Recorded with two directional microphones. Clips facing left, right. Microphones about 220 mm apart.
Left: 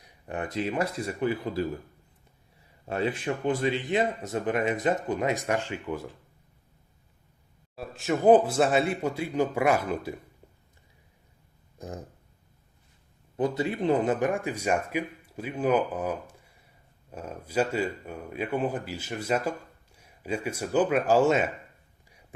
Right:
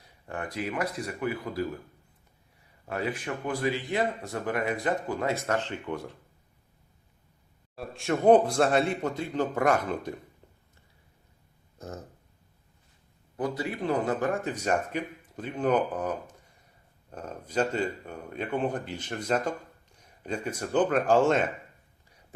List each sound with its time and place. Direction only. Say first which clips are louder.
0.0 s speech: left 3 dB; 20° left (ahead or behind)
2.8 s speech: left 3 dB; 25° left (ahead or behind); by 6.1 s 5° left (ahead or behind)
7.8 s speech: left 1 dB; centre (ahead or behind)
11.8 s speech: left 2 dB; 15° left (ahead or behind)
13.3 s speech: left 4 dB; 25° left (ahead or behind); by 21.5 s 10° left (ahead or behind)